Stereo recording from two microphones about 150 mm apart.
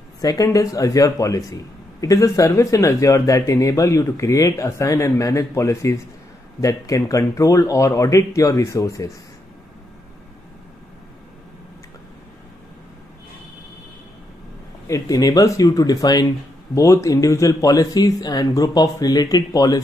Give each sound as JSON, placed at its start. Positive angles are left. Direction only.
{"t": 0.2, "sound": "a man's voice", "side_deg": 25}
{"t": 14.9, "sound": "a man's voice", "side_deg": 25}